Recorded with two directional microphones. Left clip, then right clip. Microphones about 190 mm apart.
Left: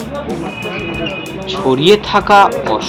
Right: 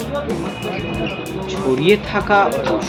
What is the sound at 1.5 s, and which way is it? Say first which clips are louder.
Speech: left 5 dB; 25° left (ahead or behind).